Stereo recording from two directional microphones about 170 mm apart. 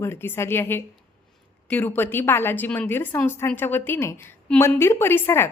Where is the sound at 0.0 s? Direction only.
15° left (ahead or behind).